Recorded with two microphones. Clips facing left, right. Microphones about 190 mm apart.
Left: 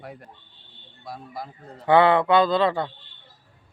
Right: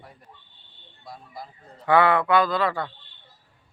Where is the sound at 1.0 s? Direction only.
75° left (ahead or behind).